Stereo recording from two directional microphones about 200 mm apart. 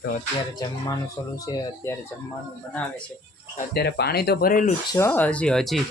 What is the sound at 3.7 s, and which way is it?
Speech, 55° left (ahead or behind).